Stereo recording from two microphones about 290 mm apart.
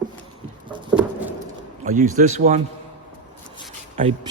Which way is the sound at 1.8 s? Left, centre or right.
Right.